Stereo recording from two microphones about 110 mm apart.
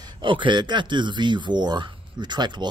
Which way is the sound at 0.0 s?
45° right (ahead or behind).